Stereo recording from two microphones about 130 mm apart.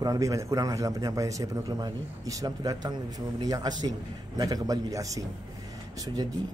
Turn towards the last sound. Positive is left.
turn(degrees=-30)  # may be behind; listen again after turning